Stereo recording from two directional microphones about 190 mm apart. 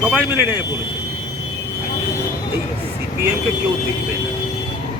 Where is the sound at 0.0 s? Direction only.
10° right (ahead or behind).